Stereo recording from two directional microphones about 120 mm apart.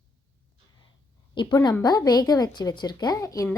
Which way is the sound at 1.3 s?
40° left (ahead or behind).